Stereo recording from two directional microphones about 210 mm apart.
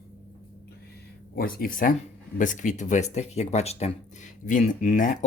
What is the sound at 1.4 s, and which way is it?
Speech, 45° left (ahead or behind).